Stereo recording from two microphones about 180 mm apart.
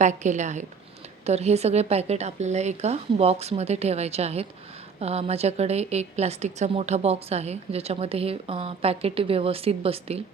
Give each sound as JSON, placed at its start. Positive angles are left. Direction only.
{"t": 0.0, "sound": "a woman's voice", "side_deg": -40}